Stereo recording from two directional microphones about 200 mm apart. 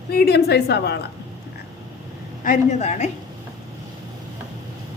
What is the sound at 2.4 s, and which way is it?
Speech, 40° left (ahead or behind).